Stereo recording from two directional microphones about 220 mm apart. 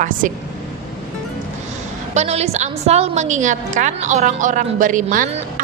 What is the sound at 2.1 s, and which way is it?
A woman's voice, 30° right (ahead or behind).